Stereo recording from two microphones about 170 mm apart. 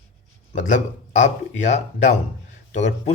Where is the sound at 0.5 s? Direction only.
45° left (ahead or behind).